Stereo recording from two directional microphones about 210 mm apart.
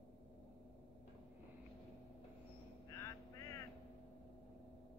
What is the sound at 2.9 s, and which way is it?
Vehicle, 15° left (ahead or behind).